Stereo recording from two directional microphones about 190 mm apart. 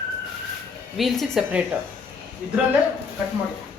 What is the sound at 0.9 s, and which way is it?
Speech, centre (ahead or behind).